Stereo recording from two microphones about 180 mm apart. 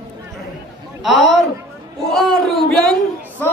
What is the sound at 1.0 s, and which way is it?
A man's voice, centre (ahead or behind).